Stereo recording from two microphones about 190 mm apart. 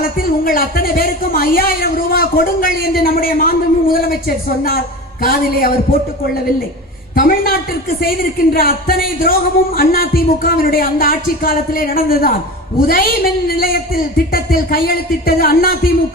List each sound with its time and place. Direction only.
0.2 s speech: 50° left (ahead or behind)